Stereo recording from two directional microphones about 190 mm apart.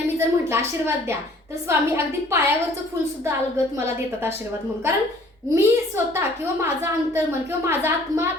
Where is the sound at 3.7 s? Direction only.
15° right (ahead or behind).